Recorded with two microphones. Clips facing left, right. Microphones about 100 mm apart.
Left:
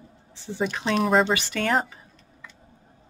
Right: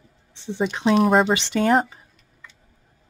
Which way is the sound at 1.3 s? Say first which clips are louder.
Right 3 dB; 25° right (ahead or behind).